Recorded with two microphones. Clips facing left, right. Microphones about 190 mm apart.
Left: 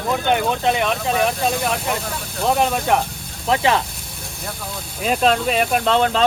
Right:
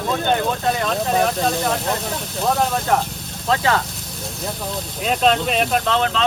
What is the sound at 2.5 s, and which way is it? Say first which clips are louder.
Speech: left 1 dB; 15° left (ahead or behind).